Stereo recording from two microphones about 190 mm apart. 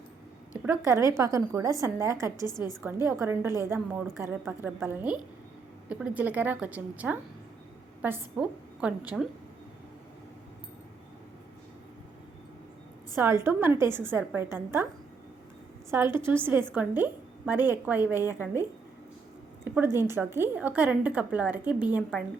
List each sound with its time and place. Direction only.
0.6 s a woman's voice: 10° right (ahead or behind)
2.5 s a woman's voice: 20° left (ahead or behind)
2.8 s a woman's voice: 15° right (ahead or behind)
13.1 s a woman's voice: 15° right (ahead or behind)
15.9 s a woman's voice: 15° right (ahead or behind)
19.6 s a woman's voice: 10° right (ahead or behind)